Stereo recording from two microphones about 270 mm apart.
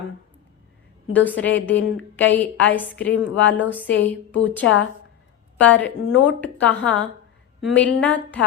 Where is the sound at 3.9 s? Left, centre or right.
Left.